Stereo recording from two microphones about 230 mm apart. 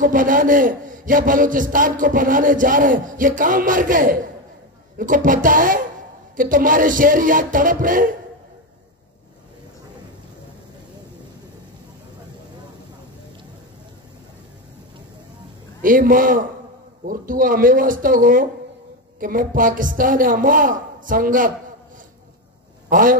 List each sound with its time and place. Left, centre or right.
0.0 s a man's voice: right
15.8 s a man's voice: right
22.8 s a man's voice: right